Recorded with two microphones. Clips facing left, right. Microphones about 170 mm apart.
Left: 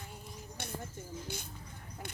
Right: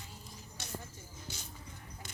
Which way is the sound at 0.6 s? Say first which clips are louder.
Left 6 dB; 55° left (ahead or behind).